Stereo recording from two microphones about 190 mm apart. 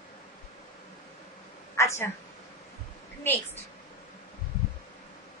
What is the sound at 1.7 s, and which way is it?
Speech, 15° left (ahead or behind).